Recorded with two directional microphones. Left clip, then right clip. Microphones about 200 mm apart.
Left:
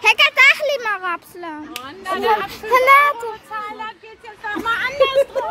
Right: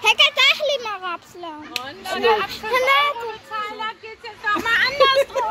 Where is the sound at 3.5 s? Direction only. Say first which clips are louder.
Right 1 dB; 45° left (ahead or behind).